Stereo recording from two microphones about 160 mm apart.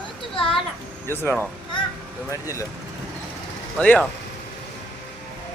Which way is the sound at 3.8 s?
5° left (ahead or behind).